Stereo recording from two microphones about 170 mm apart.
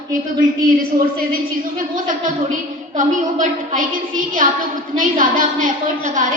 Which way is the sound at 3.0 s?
45° right (ahead or behind).